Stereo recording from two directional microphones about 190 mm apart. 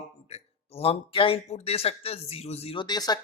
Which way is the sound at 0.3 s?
30° left (ahead or behind).